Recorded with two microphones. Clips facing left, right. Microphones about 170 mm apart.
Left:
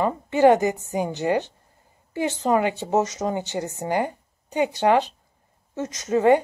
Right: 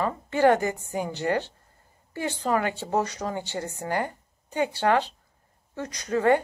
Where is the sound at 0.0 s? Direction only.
20° left (ahead or behind).